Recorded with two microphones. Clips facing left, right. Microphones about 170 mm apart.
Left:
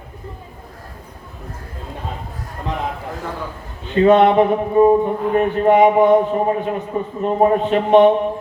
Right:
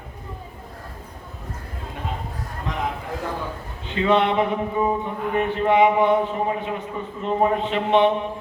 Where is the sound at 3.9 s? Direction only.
45° left (ahead or behind).